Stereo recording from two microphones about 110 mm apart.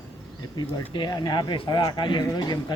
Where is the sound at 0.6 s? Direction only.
45° left (ahead or behind).